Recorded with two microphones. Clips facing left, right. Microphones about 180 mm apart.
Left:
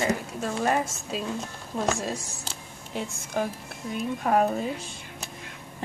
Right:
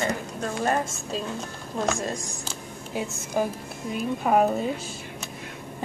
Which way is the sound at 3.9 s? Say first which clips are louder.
Right 2 dB; 5° right (ahead or behind).